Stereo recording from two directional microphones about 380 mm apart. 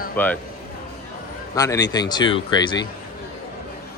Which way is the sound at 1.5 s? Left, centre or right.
Centre.